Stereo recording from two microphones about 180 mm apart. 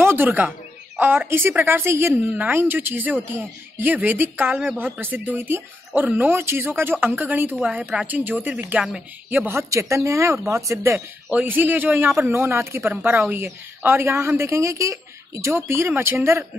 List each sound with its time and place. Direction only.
0.0 s a man's voice: 10° right (ahead or behind)